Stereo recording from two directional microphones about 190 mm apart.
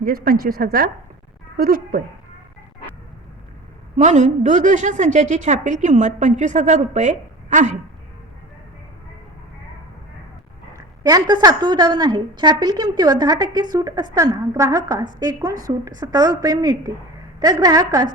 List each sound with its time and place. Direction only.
0.0 s a woman's voice: 50° right (ahead or behind)
3.9 s a woman's voice: 40° right (ahead or behind)
10.8 s a woman's voice: 20° right (ahead or behind)